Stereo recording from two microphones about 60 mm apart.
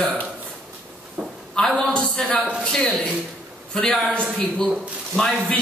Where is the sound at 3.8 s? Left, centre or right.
Centre.